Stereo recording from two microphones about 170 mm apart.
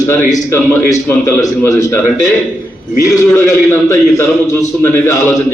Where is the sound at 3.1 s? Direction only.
15° left (ahead or behind).